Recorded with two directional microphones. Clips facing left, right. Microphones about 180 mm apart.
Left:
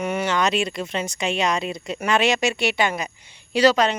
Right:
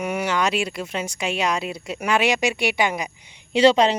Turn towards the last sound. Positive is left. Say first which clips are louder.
# right 2 dB
turn(degrees=-25)  # may be behind; listen again after turning